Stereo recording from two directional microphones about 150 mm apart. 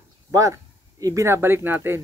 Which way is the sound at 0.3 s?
20° right (ahead or behind).